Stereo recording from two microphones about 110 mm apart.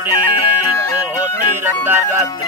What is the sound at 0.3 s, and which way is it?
Music, 45° left (ahead or behind).